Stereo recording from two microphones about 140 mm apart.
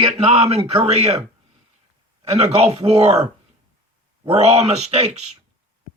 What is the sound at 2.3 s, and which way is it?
Speech, 50° right (ahead or behind).